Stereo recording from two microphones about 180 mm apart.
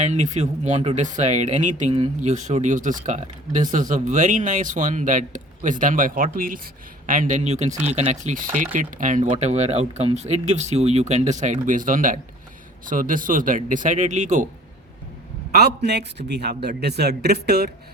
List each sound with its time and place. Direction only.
0.0 s speech: 40° right (ahead or behind)
15.5 s a man's voice: 65° right (ahead or behind)